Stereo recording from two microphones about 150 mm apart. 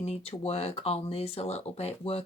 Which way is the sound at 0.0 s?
40° left (ahead or behind).